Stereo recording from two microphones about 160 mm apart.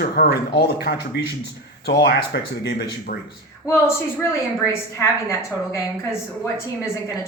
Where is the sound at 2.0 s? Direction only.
90° left.